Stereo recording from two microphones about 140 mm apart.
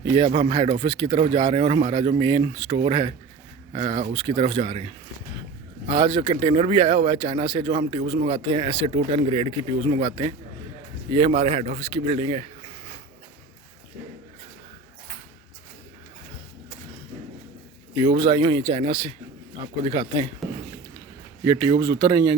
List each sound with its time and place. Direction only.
0.0 s a man's voice: 35° right (ahead or behind)
18.0 s speech: 35° right (ahead or behind)
21.4 s speech: 30° right (ahead or behind)